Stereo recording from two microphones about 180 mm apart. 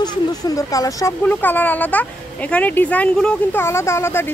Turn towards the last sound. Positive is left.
turn(degrees=15)  # may be behind; listen again after turning